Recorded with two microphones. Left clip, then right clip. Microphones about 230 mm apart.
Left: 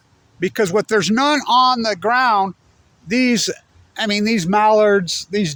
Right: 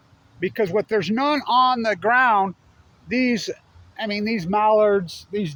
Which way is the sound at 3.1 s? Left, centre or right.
Left.